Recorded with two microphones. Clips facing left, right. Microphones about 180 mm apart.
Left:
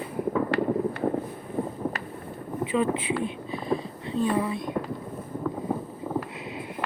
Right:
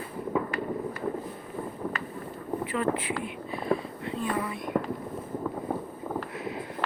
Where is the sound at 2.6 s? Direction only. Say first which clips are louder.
Left 7 dB; 20° left (ahead or behind).